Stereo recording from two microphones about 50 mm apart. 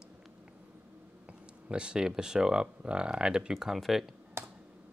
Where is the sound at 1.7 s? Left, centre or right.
Centre.